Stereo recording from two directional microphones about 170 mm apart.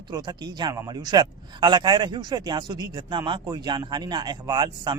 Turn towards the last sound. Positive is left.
turn(degrees=-25)  # may be behind; listen again after turning